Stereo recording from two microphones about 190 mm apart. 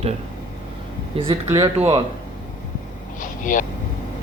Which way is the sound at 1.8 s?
30° right (ahead or behind).